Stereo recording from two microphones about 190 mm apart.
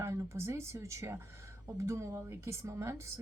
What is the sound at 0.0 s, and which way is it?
Speech, 15° right (ahead or behind).